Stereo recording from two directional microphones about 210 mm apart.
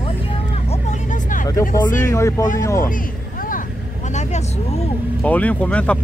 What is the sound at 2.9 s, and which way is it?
Vehicle, 40° left (ahead or behind).